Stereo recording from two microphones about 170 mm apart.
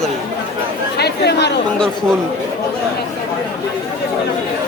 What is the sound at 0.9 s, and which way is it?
Chatter, 75° left (ahead or behind).